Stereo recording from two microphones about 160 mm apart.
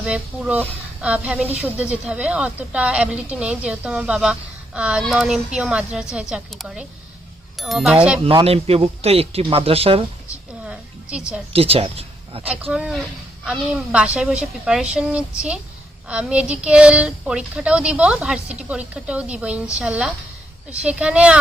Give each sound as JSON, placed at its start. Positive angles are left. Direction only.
{"t": 0.0, "sound": "a woman's voice", "side_deg": -5}
{"t": 8.2, "sound": "a man's voice", "side_deg": -35}
{"t": 11.5, "sound": "speech", "side_deg": -40}
{"t": 12.5, "sound": "a woman's voice", "side_deg": -10}